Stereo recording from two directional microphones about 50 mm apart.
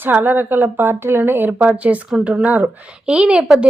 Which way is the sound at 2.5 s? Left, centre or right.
Right.